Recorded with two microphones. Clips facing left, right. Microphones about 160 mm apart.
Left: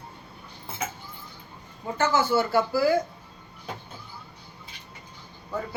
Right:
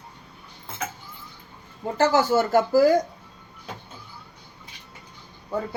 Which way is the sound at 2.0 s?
40° right (ahead or behind).